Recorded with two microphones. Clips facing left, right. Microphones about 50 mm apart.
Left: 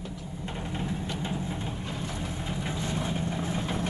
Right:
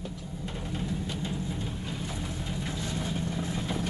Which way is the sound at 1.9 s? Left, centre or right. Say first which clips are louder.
Left 1 dB; centre.